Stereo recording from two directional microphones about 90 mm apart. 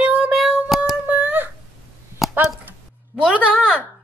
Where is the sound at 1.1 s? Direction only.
20° right (ahead or behind).